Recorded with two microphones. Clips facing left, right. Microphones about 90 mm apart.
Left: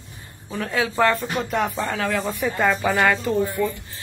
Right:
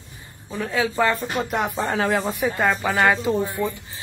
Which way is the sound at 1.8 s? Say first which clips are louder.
Right 2 dB; 25° right (ahead or behind).